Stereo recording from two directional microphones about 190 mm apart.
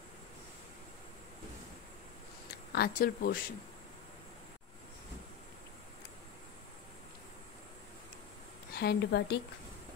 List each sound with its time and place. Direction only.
2.7 s speech: 50° left (ahead or behind)
8.7 s a woman's voice: 60° left (ahead or behind)